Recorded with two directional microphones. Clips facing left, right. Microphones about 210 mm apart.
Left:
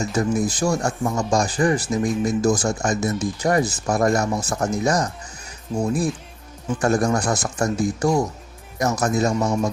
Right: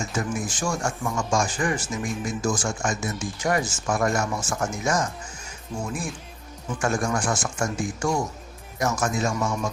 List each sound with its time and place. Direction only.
0.0 s speech: 35° left (ahead or behind)